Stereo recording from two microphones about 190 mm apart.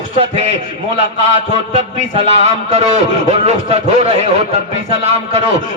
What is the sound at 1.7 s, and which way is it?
Speech, 30° right (ahead or behind).